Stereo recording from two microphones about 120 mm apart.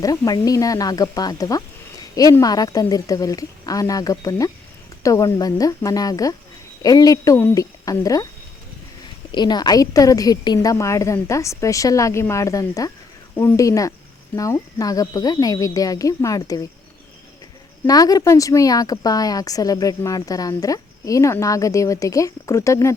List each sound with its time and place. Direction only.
0.0 s a woman's voice: 30° left (ahead or behind)
9.3 s a woman's voice: 35° left (ahead or behind)
17.8 s a woman's voice: 30° left (ahead or behind)